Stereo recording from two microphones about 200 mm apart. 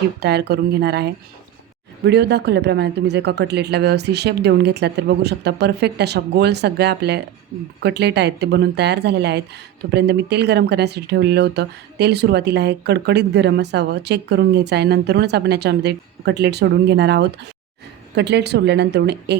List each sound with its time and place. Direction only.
0.2 s speech: 55° right (ahead or behind)